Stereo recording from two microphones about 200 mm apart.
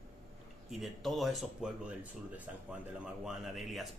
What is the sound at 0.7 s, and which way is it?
Speech, centre (ahead or behind).